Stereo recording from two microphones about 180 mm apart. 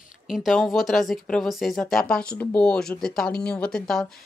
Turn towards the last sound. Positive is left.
turn(degrees=0)  # may be behind; listen again after turning